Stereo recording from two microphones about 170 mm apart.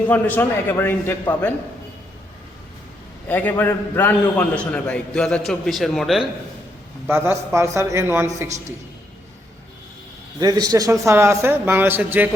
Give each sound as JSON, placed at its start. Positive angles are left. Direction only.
{"t": 0.1, "sound": "a man's voice", "side_deg": 10}
{"t": 3.2, "sound": "a man's voice", "side_deg": 10}
{"t": 7.1, "sound": "a man's voice", "side_deg": -15}
{"t": 10.4, "sound": "a man's voice", "side_deg": -20}